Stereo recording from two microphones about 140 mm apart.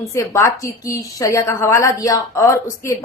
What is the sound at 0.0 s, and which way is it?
Speech, 20° left (ahead or behind).